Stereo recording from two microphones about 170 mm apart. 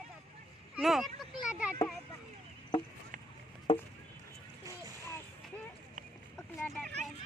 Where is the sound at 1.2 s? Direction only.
5° right (ahead or behind).